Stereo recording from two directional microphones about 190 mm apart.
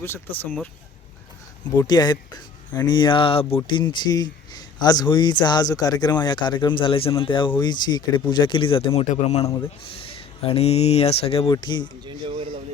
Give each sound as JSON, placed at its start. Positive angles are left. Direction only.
{"t": 0.0, "sound": "speech", "side_deg": 10}
{"t": 1.7, "sound": "speech", "side_deg": 20}
{"t": 12.0, "sound": "a sound", "side_deg": -30}